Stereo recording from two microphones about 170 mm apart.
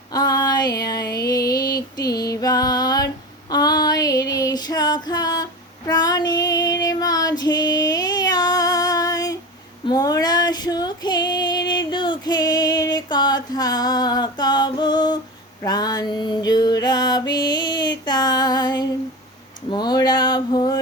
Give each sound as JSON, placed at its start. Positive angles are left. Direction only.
{"t": 0.1, "sound": "a sound", "side_deg": 20}
{"t": 2.0, "sound": "music", "side_deg": 20}
{"t": 2.3, "sound": "female singing", "side_deg": 20}
{"t": 5.9, "sound": "child singing", "side_deg": 20}
{"t": 9.8, "sound": "female singing", "side_deg": 20}
{"t": 15.6, "sound": "music", "side_deg": 20}
{"t": 19.7, "sound": "a sound", "side_deg": 25}